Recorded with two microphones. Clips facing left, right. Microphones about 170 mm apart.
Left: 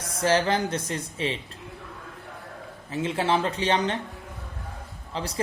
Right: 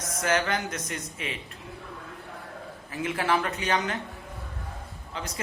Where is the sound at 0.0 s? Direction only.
30° left (ahead or behind).